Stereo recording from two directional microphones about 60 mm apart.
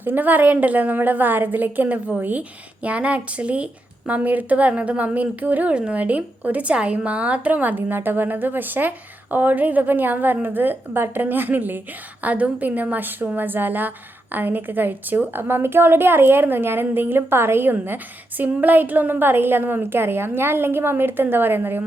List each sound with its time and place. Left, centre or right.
0.0 s a woman's voice: right